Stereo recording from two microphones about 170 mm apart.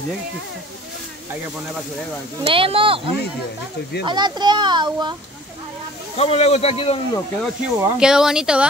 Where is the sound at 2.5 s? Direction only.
30° right (ahead or behind).